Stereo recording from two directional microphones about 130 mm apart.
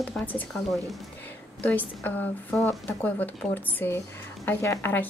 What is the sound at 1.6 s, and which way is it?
A woman's voice, 10° left (ahead or behind).